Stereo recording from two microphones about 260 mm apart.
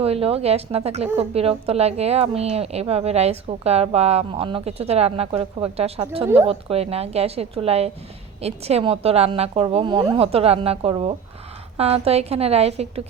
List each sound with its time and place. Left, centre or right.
0.0 s a woman's voice: right